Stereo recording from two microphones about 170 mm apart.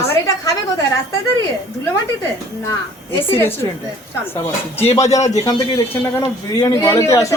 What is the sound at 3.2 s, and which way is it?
Speech, 15° left (ahead or behind).